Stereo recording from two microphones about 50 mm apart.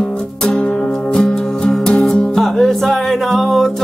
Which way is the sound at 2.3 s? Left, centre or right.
Centre.